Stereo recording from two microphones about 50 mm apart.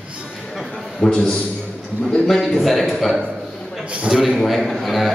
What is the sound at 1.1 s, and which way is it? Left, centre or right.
Speech, centre.